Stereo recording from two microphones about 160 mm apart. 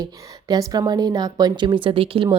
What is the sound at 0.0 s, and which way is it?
A woman's voice, 25° right (ahead or behind).